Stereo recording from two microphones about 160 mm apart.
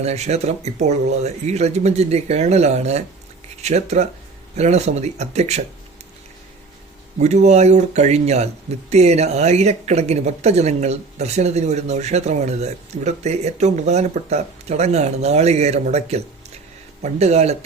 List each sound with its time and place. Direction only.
0.0 s speech: 45° right (ahead or behind)
7.2 s speech: 45° right (ahead or behind)